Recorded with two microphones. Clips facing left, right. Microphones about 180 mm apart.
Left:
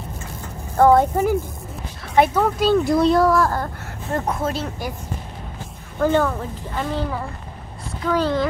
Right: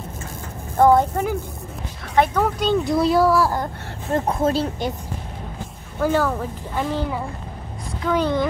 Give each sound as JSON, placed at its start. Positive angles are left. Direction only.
{"t": 0.9, "sound": "speech", "side_deg": 5}
{"t": 3.6, "sound": "speech", "side_deg": -25}
{"t": 5.9, "sound": "speech", "side_deg": -5}